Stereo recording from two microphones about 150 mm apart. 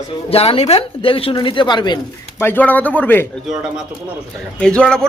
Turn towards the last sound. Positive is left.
turn(degrees=5)  # may be behind; listen again after turning